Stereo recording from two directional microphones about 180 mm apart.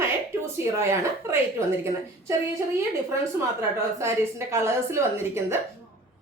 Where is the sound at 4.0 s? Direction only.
15° right (ahead or behind).